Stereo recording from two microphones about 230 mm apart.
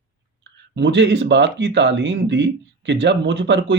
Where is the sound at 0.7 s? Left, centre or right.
Right.